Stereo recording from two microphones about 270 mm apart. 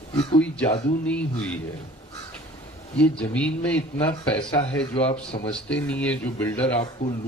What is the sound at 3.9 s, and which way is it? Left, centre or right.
Speech, centre.